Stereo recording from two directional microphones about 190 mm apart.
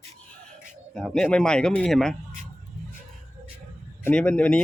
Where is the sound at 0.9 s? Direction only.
5° left (ahead or behind).